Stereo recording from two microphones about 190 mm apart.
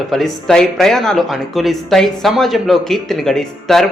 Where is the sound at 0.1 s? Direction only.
Centre (ahead or behind).